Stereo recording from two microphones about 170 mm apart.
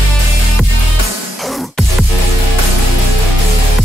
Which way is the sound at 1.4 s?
Centre (ahead or behind).